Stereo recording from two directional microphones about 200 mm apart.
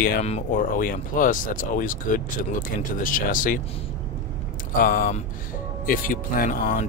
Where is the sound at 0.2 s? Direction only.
40° left (ahead or behind).